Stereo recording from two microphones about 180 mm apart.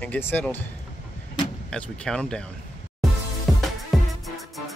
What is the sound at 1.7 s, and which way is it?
Speech, 5° left (ahead or behind).